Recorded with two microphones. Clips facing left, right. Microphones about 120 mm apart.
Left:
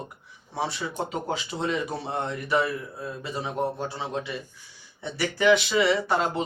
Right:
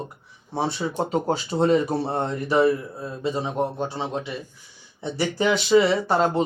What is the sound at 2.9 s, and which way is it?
A man's voice, 25° right (ahead or behind).